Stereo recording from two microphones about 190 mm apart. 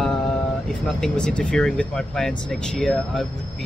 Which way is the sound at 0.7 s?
5° left (ahead or behind).